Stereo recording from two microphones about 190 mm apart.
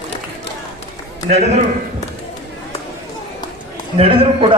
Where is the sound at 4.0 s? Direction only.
30° right (ahead or behind).